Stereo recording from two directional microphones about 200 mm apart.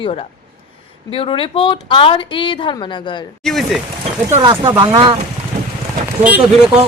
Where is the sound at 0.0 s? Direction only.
30° left (ahead or behind).